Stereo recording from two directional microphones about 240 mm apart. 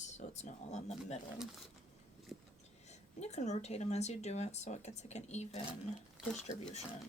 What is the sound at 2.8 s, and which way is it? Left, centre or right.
Speech, left.